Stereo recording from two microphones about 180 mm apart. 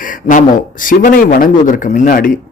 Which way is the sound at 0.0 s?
45° left (ahead or behind).